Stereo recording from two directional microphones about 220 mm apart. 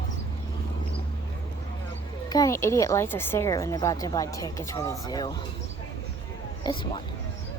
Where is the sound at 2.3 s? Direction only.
15° left (ahead or behind).